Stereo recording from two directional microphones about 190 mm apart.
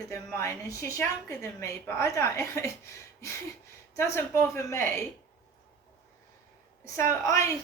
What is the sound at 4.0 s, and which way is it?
A woman's voice, 15° left (ahead or behind).